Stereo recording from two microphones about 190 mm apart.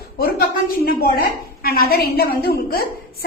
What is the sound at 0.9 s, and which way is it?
A woman's voice, 50° left (ahead or behind).